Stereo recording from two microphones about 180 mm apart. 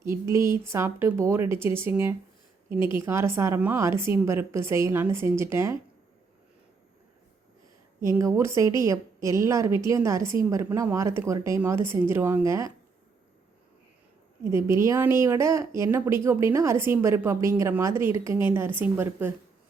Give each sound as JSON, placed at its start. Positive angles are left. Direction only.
{"t": 0.0, "sound": "speech", "side_deg": -15}
{"t": 8.0, "sound": "speech", "side_deg": -15}
{"t": 14.5, "sound": "speech", "side_deg": -15}